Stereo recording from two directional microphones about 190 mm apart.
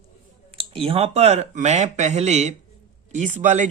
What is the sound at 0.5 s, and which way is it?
A man's voice, 30° right (ahead or behind).